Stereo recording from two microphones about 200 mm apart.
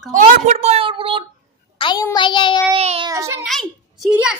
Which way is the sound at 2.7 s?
30° right (ahead or behind).